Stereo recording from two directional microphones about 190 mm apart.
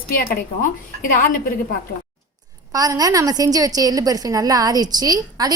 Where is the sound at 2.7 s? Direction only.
20° right (ahead or behind).